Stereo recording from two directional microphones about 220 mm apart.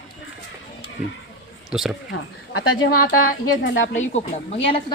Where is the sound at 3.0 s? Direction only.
40° left (ahead or behind).